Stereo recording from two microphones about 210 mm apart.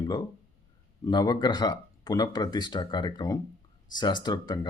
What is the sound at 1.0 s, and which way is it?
Speech, 20° left (ahead or behind).